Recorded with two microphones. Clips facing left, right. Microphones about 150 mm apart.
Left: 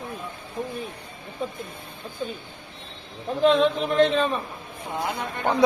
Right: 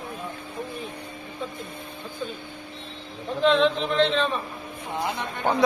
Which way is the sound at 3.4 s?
5° left (ahead or behind).